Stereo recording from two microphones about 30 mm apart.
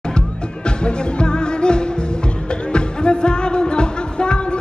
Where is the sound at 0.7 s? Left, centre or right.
Left.